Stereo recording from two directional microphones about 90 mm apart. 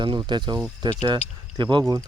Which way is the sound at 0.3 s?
60° right (ahead or behind).